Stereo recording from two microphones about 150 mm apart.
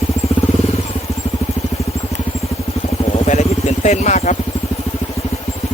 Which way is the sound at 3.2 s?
50° left (ahead or behind).